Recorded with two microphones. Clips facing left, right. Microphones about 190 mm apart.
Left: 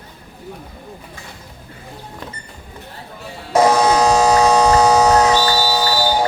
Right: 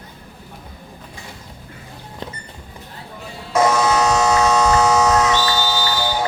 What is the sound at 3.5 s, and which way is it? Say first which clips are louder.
Electric shaver: left 3 dB; 35° left (ahead or behind).